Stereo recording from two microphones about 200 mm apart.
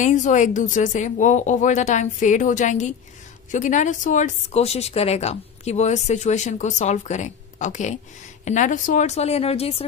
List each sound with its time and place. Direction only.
0.0 s speech: 40° left (ahead or behind)